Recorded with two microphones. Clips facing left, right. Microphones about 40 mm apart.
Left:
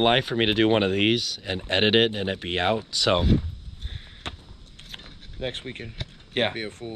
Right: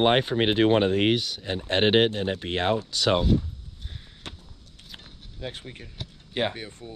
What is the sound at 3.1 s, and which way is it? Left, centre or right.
Speech, left.